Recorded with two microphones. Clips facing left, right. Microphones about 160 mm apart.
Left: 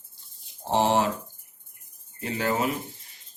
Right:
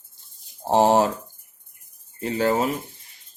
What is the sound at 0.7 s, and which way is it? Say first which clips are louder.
Speech: right 5 dB; 40° right (ahead or behind).